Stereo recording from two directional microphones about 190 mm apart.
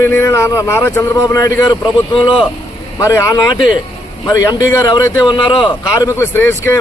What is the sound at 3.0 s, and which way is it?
A man's voice, 15° left (ahead or behind).